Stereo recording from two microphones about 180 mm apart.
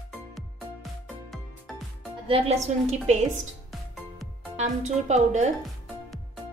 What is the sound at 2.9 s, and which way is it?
Speech, 40° right (ahead or behind).